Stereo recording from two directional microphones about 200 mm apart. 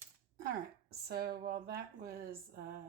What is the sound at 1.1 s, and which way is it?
Speech, 50° right (ahead or behind).